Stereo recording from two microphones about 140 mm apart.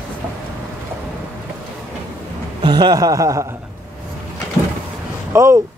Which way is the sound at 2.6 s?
30° right (ahead or behind).